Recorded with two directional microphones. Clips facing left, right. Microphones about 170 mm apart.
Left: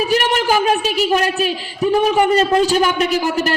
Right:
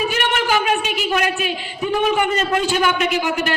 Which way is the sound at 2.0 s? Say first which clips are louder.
Left 4 dB; 35° left (ahead or behind).